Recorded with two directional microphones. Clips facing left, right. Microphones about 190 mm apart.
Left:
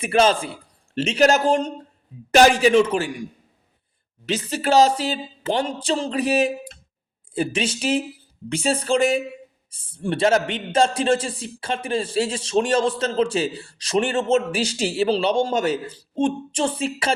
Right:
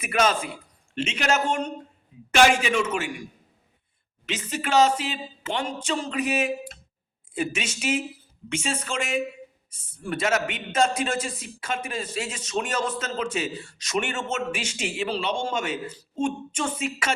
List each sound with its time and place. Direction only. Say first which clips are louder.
0.0 s a man's voice: left 5 dB; 30° left (ahead or behind)
4.3 s a man's voice: left 6 dB; 35° left (ahead or behind)